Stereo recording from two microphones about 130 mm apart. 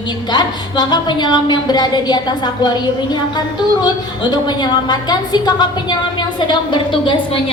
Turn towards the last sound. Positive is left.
turn(degrees=40)  # may be behind; listen again after turning